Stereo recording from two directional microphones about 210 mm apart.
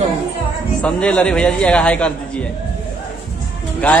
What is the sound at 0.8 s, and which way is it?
A man's voice, 5° left (ahead or behind).